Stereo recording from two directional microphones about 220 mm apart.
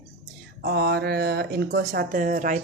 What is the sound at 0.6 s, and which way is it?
A woman's voice, 50° right (ahead or behind).